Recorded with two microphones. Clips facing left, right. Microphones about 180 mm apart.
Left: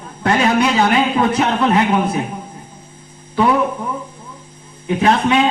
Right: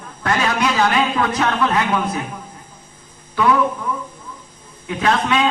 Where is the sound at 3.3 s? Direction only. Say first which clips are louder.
Left 2 dB; 25° left (ahead or behind).